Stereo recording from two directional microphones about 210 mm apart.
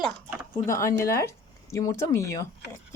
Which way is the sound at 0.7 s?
15° left (ahead or behind).